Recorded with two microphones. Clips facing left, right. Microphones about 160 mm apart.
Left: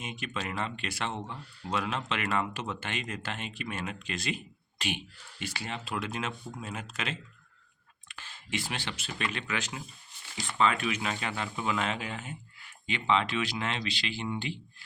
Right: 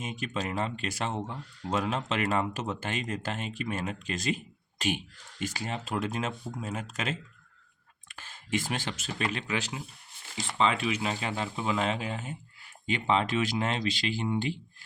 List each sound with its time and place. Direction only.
0.0 s speech: 40° right (ahead or behind)